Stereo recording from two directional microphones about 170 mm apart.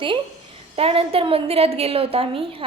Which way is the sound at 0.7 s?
35° right (ahead or behind).